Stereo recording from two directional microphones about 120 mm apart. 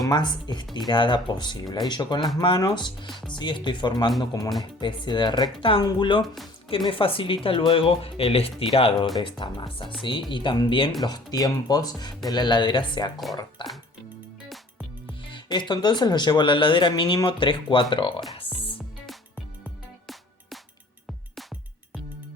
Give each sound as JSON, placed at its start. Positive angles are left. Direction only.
{"t": 0.1, "sound": "speech", "side_deg": 35}
{"t": 3.1, "sound": "speech", "side_deg": 0}
{"t": 3.3, "sound": "speech", "side_deg": 40}
{"t": 6.2, "sound": "speech", "side_deg": 0}
{"t": 6.7, "sound": "speech", "side_deg": 45}
{"t": 9.1, "sound": "speech", "side_deg": 40}
{"t": 15.3, "sound": "speech", "side_deg": 40}